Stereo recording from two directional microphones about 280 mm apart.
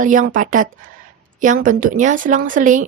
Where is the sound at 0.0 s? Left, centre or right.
Right.